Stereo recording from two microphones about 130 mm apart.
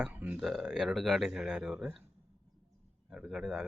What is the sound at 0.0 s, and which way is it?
Speech, 10° right (ahead or behind).